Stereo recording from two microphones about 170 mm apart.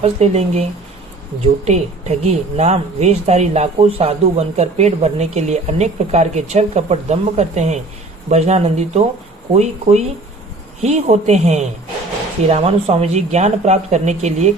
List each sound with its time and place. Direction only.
0.0 s speech: 40° right (ahead or behind)